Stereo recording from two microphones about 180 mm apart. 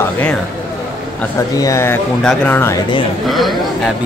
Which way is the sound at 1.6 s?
15° left (ahead or behind).